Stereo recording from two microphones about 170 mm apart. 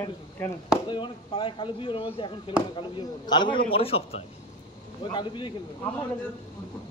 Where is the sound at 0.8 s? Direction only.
30° left (ahead or behind).